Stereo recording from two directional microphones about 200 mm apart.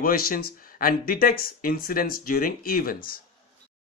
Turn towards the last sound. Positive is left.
turn(degrees=45)  # may be behind; listen again after turning